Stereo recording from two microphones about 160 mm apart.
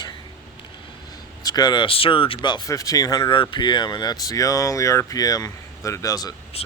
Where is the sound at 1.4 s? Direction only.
25° left (ahead or behind).